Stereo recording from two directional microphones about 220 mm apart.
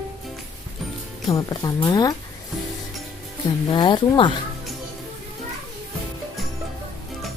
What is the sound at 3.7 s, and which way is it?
Speech, 20° left (ahead or behind).